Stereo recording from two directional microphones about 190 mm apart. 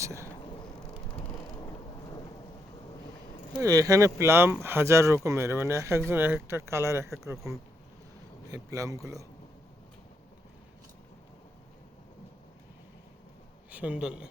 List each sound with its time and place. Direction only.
0.0 s a sound: 15° right (ahead or behind)
3.6 s speech: 20° right (ahead or behind)
13.7 s a man's voice: 10° right (ahead or behind)